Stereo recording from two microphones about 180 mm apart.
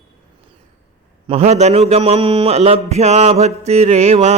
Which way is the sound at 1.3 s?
35° right (ahead or behind).